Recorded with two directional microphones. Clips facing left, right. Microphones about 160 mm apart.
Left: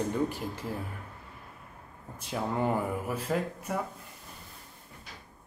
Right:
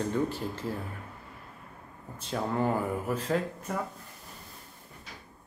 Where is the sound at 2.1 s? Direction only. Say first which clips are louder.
Right 1 dB; 10° left (ahead or behind).